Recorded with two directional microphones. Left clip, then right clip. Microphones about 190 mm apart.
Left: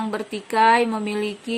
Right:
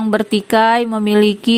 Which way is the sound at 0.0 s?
45° right (ahead or behind).